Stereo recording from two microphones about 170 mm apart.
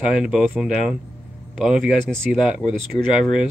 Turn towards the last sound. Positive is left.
turn(degrees=-5)  # may be behind; listen again after turning